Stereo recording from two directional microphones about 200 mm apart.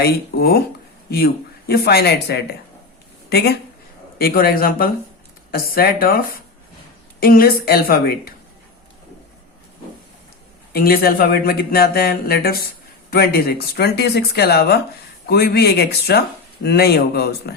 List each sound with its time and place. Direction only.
1.1 s speech: 50° left (ahead or behind)
7.2 s speech: 50° left (ahead or behind)
10.7 s speech: 50° left (ahead or behind)